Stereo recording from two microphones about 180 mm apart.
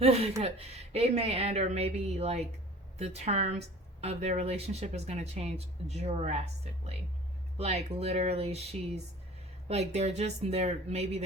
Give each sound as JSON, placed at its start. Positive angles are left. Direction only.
{"t": 0.0, "sound": "speech", "side_deg": -35}